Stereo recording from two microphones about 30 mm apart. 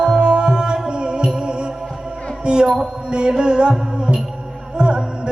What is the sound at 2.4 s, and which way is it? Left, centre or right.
Speech, right.